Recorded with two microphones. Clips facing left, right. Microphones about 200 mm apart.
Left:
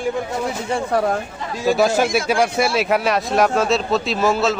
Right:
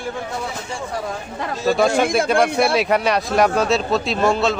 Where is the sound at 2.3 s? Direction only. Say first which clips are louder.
Right 1 dB; centre (ahead or behind).